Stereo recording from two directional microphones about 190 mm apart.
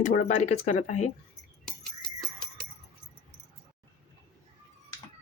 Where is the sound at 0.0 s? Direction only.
45° left (ahead or behind).